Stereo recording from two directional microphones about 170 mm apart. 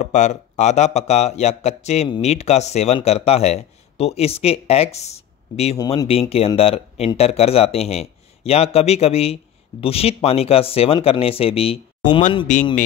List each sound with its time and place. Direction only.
0.0 s speech: 45° left (ahead or behind)
12.5 s speech: 45° left (ahead or behind)